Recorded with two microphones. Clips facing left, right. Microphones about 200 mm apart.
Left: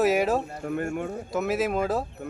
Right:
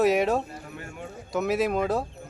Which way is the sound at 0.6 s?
50° left (ahead or behind).